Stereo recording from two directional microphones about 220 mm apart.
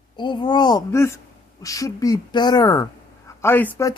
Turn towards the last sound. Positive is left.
turn(degrees=10)  # may be behind; listen again after turning